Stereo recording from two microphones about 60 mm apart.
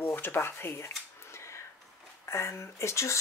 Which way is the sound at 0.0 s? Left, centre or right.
Left.